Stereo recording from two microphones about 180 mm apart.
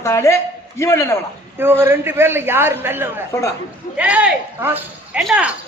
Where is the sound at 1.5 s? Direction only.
10° right (ahead or behind).